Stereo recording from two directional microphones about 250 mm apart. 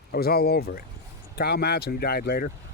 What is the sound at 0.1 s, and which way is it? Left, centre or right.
Speech, left.